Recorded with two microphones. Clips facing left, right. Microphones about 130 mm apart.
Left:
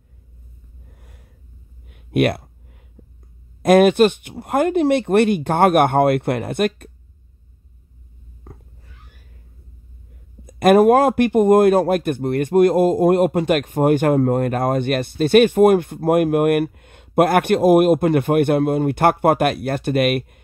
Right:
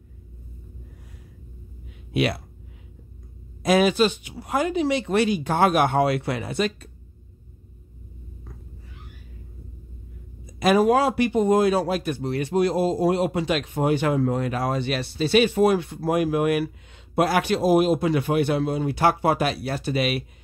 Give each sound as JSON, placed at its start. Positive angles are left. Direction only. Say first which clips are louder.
{"t": 2.0, "sound": "speech", "louder": "left 6 dB", "side_deg": 55}
{"t": 3.6, "sound": "speech", "louder": "left 7 dB", "side_deg": 55}
{"t": 10.4, "sound": "a man's voice", "louder": "left 7 dB", "side_deg": 55}